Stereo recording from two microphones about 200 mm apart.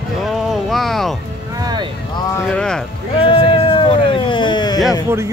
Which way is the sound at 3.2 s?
25° left (ahead or behind).